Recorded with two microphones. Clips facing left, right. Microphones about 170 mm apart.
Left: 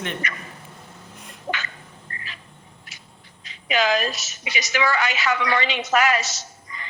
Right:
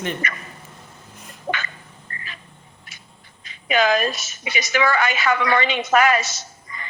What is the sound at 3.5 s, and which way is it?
A woman's voice, 50° right (ahead or behind).